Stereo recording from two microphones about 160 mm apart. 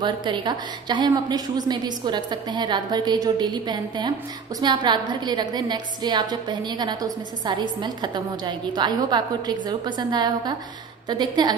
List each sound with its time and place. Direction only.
0.0 s a woman's voice: 30° right (ahead or behind)